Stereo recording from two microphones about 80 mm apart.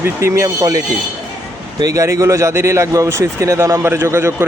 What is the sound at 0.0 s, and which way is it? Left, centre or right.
Speech, right.